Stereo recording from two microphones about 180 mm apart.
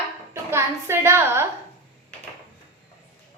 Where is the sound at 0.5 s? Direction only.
15° right (ahead or behind).